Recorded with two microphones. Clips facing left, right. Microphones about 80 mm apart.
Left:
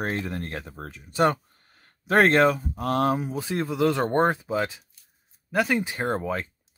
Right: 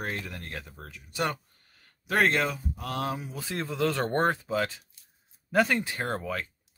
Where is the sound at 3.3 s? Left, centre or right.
Left.